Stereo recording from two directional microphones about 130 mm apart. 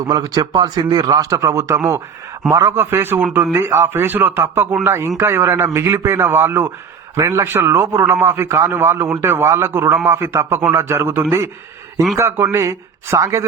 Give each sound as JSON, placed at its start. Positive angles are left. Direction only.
{"t": 0.0, "sound": "a man's voice", "side_deg": -30}